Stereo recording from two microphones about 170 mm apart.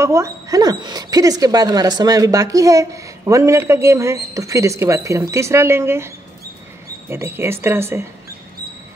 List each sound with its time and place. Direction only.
0.0 s speech: 15° right (ahead or behind)